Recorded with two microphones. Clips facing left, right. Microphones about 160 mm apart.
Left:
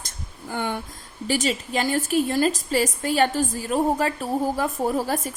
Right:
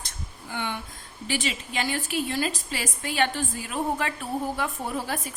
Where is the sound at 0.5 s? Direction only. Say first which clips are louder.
Left 5 dB; 45° left (ahead or behind).